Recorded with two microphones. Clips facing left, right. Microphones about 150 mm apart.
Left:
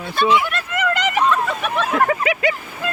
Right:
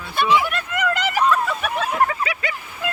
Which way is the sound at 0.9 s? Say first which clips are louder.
Left 1 dB; 5° right (ahead or behind).